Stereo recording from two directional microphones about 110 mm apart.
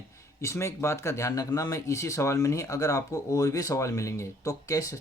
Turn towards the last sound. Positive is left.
turn(degrees=30)  # may be behind; listen again after turning